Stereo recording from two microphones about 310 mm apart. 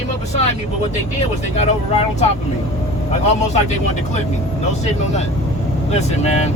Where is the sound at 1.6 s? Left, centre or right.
Left.